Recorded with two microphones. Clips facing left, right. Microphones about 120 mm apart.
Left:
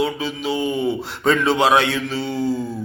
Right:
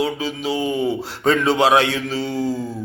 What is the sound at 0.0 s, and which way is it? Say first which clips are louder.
A man's voice: even; 40° right (ahead or behind).